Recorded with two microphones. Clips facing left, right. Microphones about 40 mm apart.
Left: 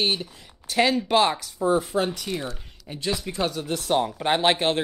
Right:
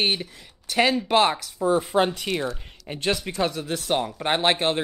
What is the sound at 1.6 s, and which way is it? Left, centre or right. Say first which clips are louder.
Speech: even; centre.